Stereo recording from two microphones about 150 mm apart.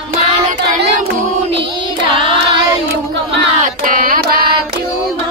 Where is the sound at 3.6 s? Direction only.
65° right (ahead or behind).